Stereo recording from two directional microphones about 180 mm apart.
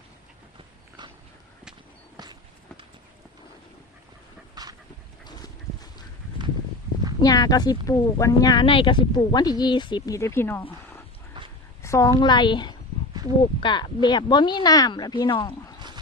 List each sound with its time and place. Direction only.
2.1 s walk: 25° right (ahead or behind)
4.6 s dog: 20° right (ahead or behind)
5.2 s duck: 20° left (ahead or behind)
7.2 s speech: 20° left (ahead or behind)
11.3 s a sound: 25° right (ahead or behind)
11.8 s speech: 15° left (ahead or behind)